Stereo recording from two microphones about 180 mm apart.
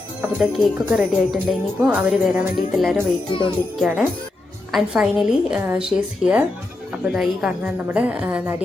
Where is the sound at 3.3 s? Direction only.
30° left (ahead or behind).